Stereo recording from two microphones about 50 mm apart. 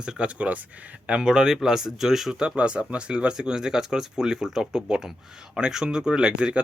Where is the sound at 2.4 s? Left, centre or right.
Centre.